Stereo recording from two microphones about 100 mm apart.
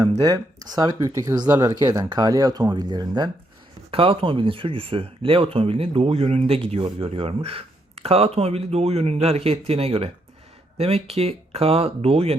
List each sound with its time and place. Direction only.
0.2 s speech: 40° right (ahead or behind)
3.9 s speech: 65° right (ahead or behind); by 12.4 s 85° right